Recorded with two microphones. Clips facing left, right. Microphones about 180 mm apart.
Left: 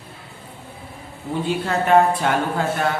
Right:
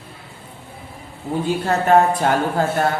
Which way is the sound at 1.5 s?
40° right (ahead or behind).